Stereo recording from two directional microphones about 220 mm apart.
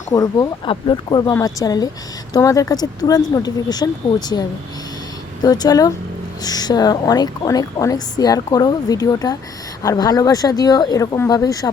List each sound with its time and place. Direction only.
0.1 s a woman's voice: 15° left (ahead or behind)
5.4 s a woman's voice: 15° left (ahead or behind)